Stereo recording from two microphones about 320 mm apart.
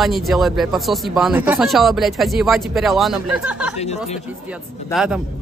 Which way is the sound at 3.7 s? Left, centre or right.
Centre.